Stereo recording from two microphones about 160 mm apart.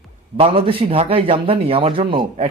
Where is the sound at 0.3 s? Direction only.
35° right (ahead or behind).